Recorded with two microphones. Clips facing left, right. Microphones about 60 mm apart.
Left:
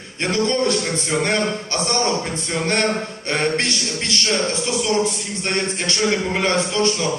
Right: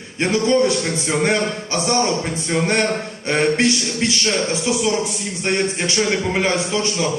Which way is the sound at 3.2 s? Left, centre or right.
Centre.